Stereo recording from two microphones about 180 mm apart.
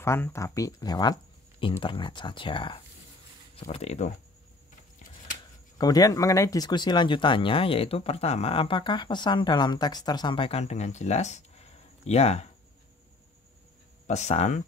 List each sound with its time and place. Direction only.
0.0 s speech: 15° left (ahead or behind); by 4.1 s 40° left (ahead or behind)
5.8 s speech: 20° left (ahead or behind); by 12.4 s 40° left (ahead or behind)
14.0 s speech: 40° left (ahead or behind)